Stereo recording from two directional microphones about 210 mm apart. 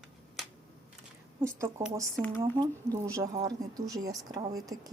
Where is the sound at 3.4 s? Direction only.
15° right (ahead or behind).